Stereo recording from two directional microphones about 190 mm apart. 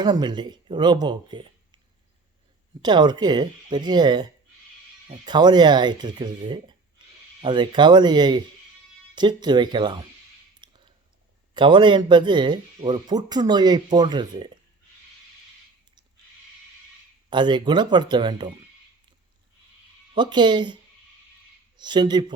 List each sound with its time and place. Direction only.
0.0 s speech: 20° right (ahead or behind)
2.8 s speech: 20° right (ahead or behind)
10.6 s a sound: 25° right (ahead or behind)
11.5 s speech: 25° right (ahead or behind)
17.2 s speech: 25° right (ahead or behind)
20.1 s speech: 25° right (ahead or behind)
21.8 s speech: 25° right (ahead or behind)